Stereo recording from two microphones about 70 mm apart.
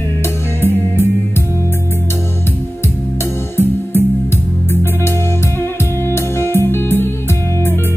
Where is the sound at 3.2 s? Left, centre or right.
Left.